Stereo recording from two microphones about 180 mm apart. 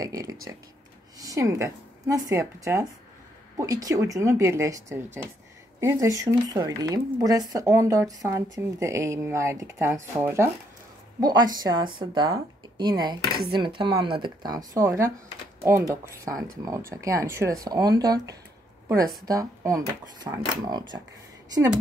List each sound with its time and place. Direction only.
0.0 s a woman's voice: 20° right (ahead or behind)